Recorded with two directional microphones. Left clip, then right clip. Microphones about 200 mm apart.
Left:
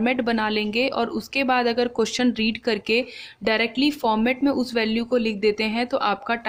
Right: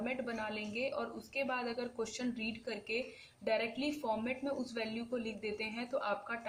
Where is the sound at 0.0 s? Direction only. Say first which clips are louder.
Left 17 dB; 50° left (ahead or behind).